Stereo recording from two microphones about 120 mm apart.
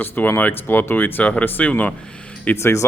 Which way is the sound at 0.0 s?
20° left (ahead or behind).